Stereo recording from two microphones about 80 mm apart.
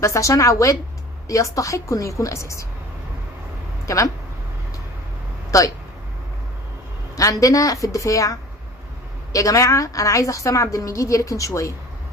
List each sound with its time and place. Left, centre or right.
0.0 s a woman's voice: left
3.8 s a woman's voice: left
5.5 s speech: left
7.2 s a woman's voice: left